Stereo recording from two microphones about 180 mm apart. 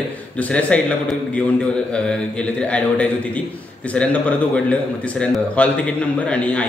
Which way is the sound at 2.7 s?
5° left (ahead or behind).